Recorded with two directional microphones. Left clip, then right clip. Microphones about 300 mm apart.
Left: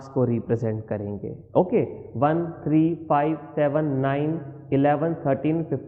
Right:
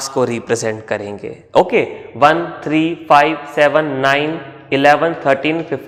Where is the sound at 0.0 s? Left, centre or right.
Centre.